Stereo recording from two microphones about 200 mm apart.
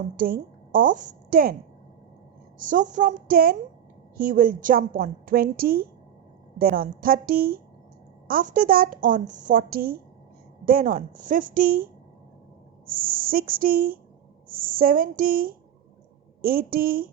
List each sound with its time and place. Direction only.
0.2 s a woman's voice: 45° right (ahead or behind)
2.6 s a woman's voice: 40° right (ahead or behind)